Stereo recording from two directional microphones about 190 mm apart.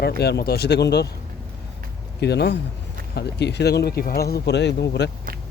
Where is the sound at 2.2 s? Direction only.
60° left (ahead or behind).